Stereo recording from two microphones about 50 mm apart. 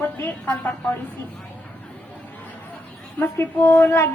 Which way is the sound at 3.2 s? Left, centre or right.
Left.